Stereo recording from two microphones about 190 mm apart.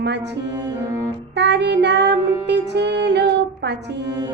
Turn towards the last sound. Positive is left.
turn(degrees=-65)  # may be behind; listen again after turning